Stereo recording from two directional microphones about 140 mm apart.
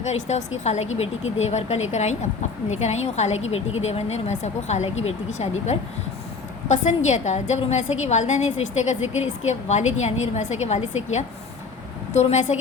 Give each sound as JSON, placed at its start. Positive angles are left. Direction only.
{"t": 0.0, "sound": "a woman's voice", "side_deg": 55}